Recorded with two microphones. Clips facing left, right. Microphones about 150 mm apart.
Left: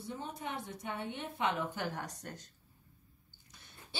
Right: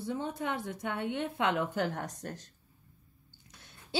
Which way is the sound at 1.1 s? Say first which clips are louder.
Right 4 dB; 80° right.